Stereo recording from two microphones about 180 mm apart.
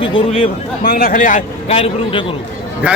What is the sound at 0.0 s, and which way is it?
Speech, 30° left (ahead or behind).